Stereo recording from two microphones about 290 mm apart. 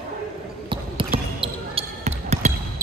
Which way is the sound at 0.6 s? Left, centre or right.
Centre.